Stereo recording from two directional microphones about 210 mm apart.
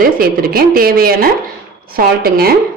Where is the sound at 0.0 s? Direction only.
45° right (ahead or behind).